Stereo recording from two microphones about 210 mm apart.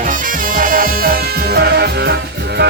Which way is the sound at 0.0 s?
40° right (ahead or behind).